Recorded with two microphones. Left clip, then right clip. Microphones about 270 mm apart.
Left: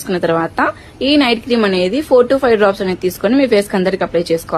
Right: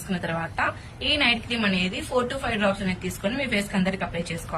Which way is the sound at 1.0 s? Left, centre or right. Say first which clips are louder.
Left 9 dB; centre.